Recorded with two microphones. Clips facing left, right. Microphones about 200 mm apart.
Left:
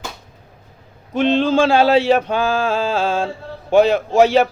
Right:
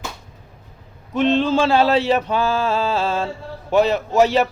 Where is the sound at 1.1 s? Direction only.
Centre (ahead or behind).